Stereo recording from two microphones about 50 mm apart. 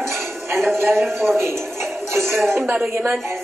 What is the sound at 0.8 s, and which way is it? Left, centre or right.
A man's voice, right.